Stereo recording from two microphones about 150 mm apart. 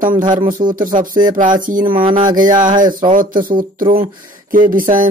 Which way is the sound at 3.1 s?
65° right (ahead or behind).